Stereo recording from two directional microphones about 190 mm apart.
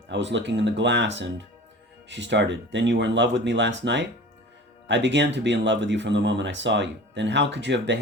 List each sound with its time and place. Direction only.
0.1 s speech: 70° right (ahead or behind)
4.9 s speech: 70° right (ahead or behind)